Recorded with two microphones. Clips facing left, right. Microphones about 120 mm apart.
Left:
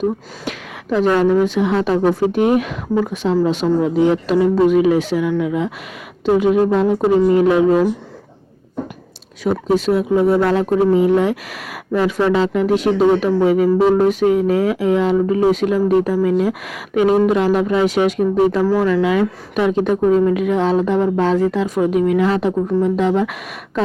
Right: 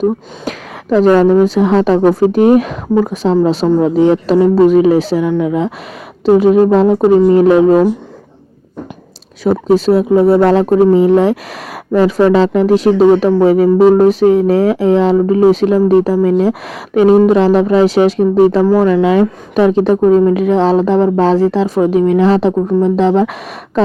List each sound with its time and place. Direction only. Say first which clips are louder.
0.0 s speech: right 5 dB; 40° right (ahead or behind)
9.4 s speech: right 6 dB; 35° right (ahead or behind)